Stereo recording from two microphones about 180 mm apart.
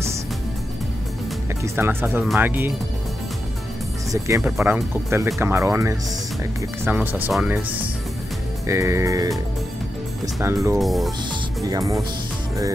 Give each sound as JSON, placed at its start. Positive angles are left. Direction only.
{"t": 1.6, "sound": "speech", "side_deg": -15}
{"t": 4.4, "sound": "speech", "side_deg": -5}
{"t": 10.8, "sound": "speech", "side_deg": 0}
{"t": 11.6, "sound": "speech", "side_deg": -20}